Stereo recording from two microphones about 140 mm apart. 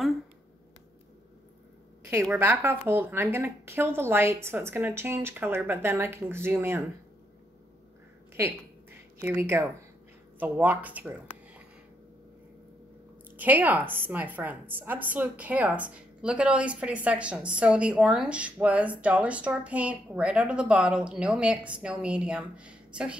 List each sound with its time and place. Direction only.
2.3 s a woman's voice: 15° right (ahead or behind)
9.2 s a woman's voice: 15° right (ahead or behind)
13.4 s a woman's voice: 10° right (ahead or behind)